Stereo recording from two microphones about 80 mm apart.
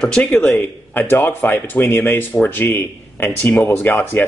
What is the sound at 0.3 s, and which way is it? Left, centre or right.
Speech, left.